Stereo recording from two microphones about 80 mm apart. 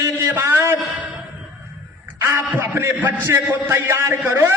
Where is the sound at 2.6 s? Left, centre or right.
Right.